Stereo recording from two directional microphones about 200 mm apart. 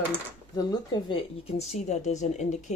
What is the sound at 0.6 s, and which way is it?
Speech, 20° left (ahead or behind).